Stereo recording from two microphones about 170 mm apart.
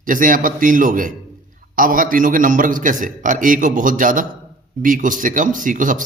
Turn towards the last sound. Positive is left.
turn(degrees=-50)  # may be behind; listen again after turning